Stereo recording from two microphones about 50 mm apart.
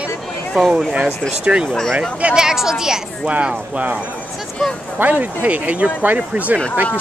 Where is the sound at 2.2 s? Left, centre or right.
Centre.